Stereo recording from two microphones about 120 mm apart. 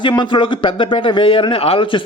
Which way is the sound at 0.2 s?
45° left (ahead or behind).